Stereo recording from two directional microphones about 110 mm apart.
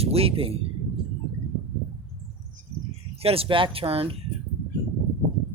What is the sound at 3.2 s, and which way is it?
Speech, 60° right (ahead or behind).